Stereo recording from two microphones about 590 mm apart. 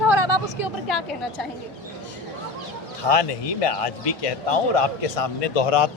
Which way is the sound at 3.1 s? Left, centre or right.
Left.